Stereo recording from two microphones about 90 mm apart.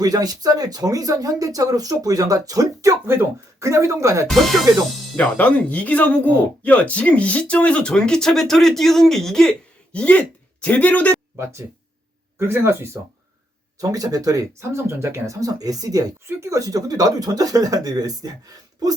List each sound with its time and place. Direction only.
0.0 s speech: 45° right (ahead or behind)
4.3 s speech: centre (ahead or behind)
5.1 s speech: 15° left (ahead or behind)
12.4 s speech: 25° right (ahead or behind)
13.7 s speech: 40° right (ahead or behind)